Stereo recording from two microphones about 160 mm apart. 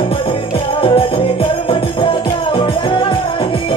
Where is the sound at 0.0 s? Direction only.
35° left (ahead or behind).